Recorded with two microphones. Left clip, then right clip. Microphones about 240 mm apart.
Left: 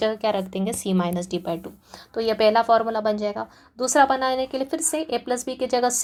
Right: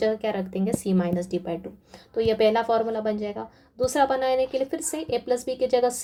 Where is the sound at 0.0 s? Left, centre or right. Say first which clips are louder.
Left 2 dB; centre.